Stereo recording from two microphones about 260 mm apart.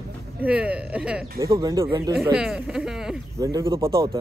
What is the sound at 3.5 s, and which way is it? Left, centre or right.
Speech, centre.